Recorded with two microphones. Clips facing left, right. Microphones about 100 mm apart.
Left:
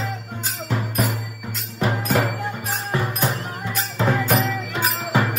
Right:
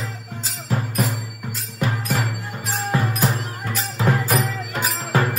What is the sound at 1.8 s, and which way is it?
Music, 90° left.